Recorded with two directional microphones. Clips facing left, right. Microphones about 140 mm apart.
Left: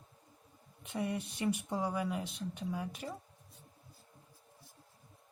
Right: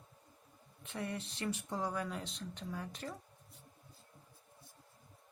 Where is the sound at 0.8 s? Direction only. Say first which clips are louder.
Left 5 dB; 15° left (ahead or behind).